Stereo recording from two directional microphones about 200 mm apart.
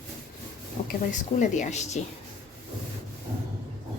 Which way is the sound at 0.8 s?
40° left (ahead or behind).